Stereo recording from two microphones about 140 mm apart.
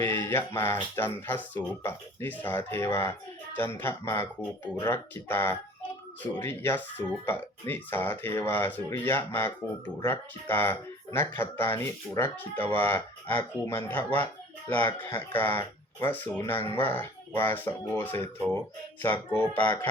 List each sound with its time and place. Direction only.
0.0 s speech: 15° left (ahead or behind)